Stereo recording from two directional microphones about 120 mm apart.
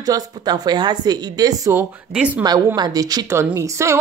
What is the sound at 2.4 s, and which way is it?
Speech, 35° right (ahead or behind).